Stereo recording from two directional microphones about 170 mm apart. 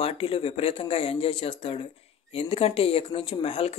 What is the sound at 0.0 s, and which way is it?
Speech, 35° left (ahead or behind).